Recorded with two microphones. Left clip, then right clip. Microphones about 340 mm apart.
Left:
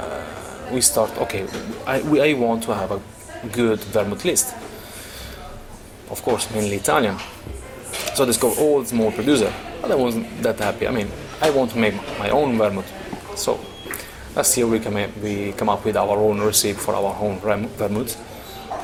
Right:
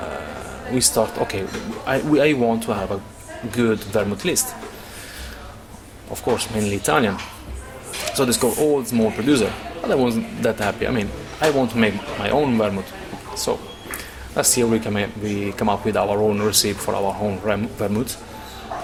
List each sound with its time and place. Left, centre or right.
0.8 s a man's voice: right
6.3 s a man's voice: right
8.1 s a man's voice: right